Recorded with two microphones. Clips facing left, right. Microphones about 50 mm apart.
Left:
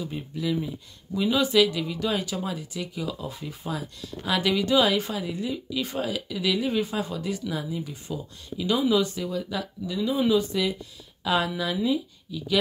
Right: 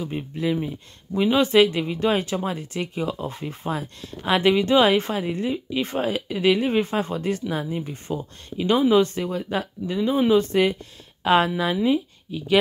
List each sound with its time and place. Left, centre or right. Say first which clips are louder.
0.0 s speech: right 4 dB; right